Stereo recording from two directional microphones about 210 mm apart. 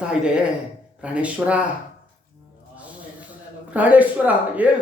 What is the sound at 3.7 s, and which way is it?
A man's voice, 5° right (ahead or behind).